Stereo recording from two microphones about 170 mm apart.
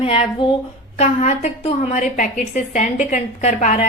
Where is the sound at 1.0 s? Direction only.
40° left (ahead or behind).